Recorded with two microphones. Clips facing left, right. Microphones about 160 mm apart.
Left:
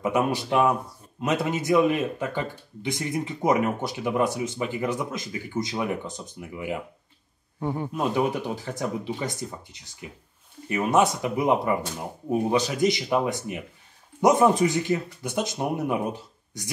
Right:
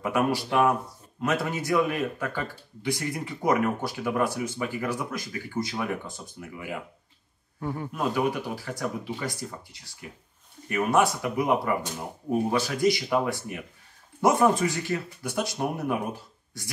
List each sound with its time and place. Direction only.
0.0 s speech: 20° left (ahead or behind)